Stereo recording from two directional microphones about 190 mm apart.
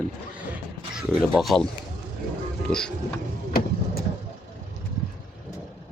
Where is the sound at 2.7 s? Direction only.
5° left (ahead or behind).